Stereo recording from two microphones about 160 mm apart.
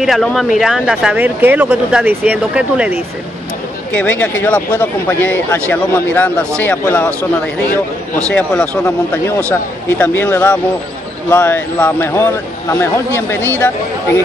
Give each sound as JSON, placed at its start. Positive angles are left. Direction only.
{"t": 0.0, "sound": "speech", "side_deg": 0}
{"t": 3.9, "sound": "speech", "side_deg": 10}
{"t": 8.3, "sound": "speech", "side_deg": 5}